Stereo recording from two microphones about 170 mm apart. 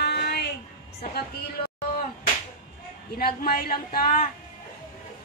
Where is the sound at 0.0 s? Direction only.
70° left (ahead or behind).